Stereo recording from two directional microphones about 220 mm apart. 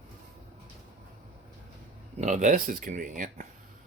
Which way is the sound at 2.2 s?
35° right (ahead or behind).